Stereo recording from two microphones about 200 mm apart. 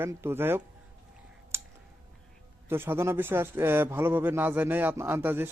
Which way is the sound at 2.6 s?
10° right (ahead or behind).